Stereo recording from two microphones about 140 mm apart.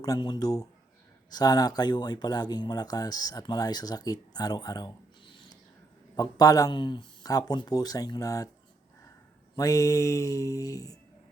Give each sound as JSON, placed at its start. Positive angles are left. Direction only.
{"t": 0.0, "sound": "speech", "side_deg": 30}
{"t": 6.1, "sound": "speech", "side_deg": 25}
{"t": 9.6, "sound": "speech", "side_deg": 25}